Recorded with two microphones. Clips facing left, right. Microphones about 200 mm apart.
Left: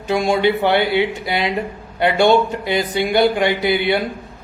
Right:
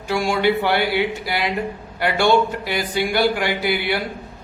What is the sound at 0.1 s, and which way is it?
A man's voice, 20° left (ahead or behind).